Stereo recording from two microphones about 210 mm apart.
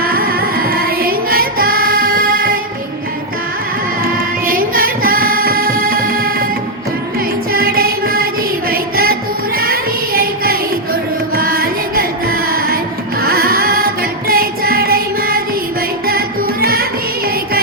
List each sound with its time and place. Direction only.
0.0 s carnatic music: 45° right (ahead or behind)
4.0 s music: 45° right (ahead or behind)
7.5 s music: 45° right (ahead or behind)
9.6 s child singing: 45° right (ahead or behind)
11.3 s music: 45° right (ahead or behind)